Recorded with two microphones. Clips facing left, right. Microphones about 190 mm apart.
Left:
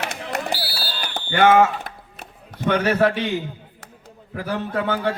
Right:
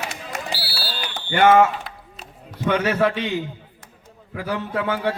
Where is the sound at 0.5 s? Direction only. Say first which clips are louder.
Left 2 dB; 45° left (ahead or behind).